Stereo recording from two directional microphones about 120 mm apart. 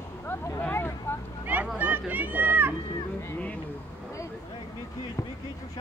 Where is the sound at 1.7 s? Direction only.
15° right (ahead or behind).